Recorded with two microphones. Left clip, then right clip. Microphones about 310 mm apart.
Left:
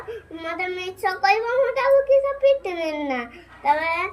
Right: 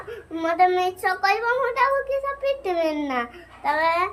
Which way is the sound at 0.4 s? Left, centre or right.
Centre.